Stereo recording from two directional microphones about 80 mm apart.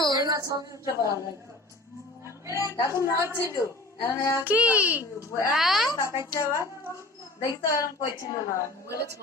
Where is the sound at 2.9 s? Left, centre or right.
Left.